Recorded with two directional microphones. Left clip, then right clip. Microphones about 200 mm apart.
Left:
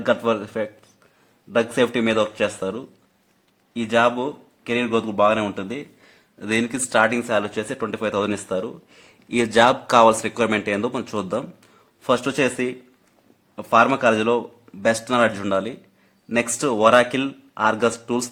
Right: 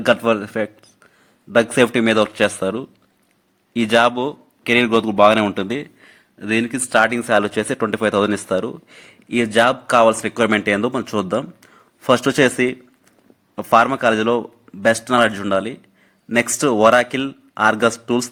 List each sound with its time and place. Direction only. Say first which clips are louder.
0.0 s speech: right 4 dB; 15° right (ahead or behind)
7.0 s speech: right 3 dB; 25° right (ahead or behind)
9.3 s speech: right 1 dB; 5° right (ahead or behind)